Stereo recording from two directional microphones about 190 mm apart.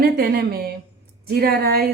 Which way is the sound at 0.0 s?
55° right (ahead or behind).